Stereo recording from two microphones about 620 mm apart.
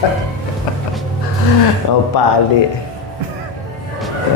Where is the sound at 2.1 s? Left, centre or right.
Left.